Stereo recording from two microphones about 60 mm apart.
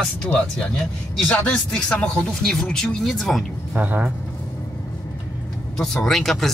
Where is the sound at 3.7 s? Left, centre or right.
Right.